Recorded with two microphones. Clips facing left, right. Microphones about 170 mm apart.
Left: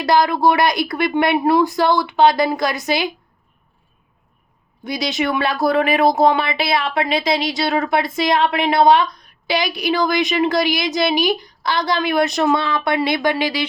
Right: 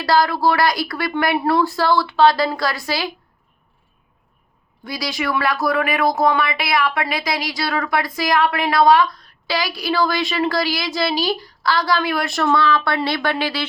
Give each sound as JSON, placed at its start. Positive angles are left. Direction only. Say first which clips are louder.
{"t": 0.0, "sound": "speech", "louder": "left 2 dB", "side_deg": 20}
{"t": 4.8, "sound": "speech", "louder": "left 4 dB", "side_deg": 20}